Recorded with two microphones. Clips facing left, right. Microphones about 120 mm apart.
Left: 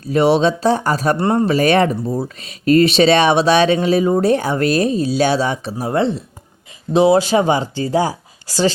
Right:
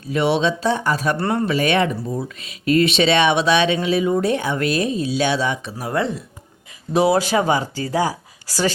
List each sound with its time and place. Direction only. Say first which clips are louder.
0.0 s speech: left 5 dB; 40° left (ahead or behind)